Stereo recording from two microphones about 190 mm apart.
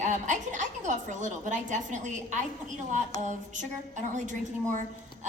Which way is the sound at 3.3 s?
40° right (ahead or behind).